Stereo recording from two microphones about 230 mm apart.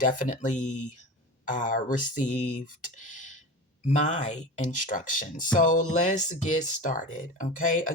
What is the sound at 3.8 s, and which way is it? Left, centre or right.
Speech, left.